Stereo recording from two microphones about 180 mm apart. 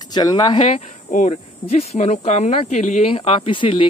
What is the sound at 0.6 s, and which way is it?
Speech, 40° left (ahead or behind).